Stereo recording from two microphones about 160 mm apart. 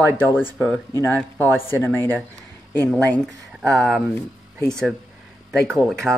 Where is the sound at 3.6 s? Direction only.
Centre (ahead or behind).